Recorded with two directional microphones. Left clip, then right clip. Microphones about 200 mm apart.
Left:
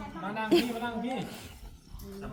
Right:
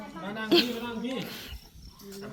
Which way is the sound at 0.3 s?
5° left (ahead or behind).